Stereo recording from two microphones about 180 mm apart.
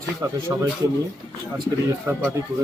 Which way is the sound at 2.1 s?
15° right (ahead or behind).